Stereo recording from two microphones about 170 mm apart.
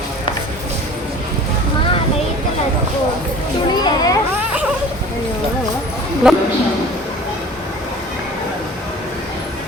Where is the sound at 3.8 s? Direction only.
25° left (ahead or behind).